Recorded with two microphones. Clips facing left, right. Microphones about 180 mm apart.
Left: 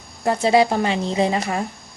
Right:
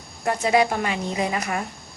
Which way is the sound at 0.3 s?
30° left (ahead or behind).